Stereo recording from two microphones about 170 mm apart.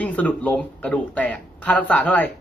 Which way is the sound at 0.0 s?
10° left (ahead or behind).